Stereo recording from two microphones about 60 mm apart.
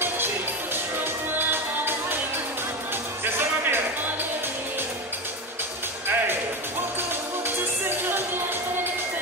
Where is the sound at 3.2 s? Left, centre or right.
Right.